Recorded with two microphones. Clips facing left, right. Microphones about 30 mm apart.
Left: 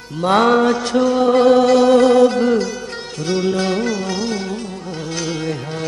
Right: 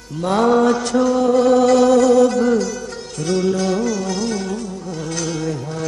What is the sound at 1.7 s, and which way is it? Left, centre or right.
Music, left.